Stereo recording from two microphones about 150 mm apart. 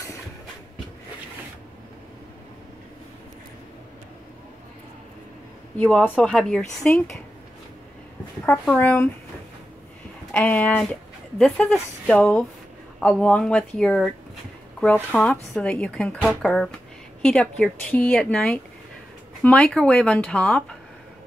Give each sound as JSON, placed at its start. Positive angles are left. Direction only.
{"t": 5.8, "sound": "speech", "side_deg": 10}
{"t": 8.7, "sound": "speech", "side_deg": 10}
{"t": 10.3, "sound": "speech", "side_deg": 10}